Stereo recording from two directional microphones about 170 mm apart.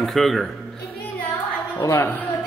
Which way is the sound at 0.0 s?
Centre (ahead or behind).